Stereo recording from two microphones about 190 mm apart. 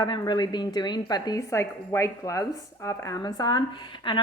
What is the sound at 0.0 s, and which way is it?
Speech, 20° left (ahead or behind).